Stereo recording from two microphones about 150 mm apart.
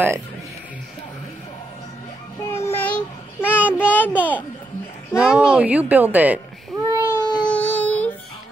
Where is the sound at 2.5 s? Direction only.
15° left (ahead or behind).